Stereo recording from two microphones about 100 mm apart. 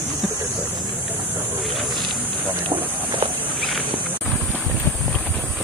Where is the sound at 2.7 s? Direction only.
20° right (ahead or behind).